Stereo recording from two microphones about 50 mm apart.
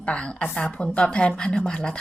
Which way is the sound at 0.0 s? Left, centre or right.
Left.